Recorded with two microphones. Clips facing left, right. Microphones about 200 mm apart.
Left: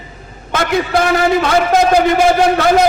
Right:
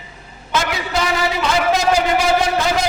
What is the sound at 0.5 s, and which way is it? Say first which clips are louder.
A man's voice: left 6 dB; 55° left (ahead or behind).